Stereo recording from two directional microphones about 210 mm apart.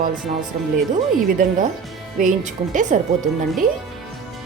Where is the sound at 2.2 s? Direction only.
35° right (ahead or behind).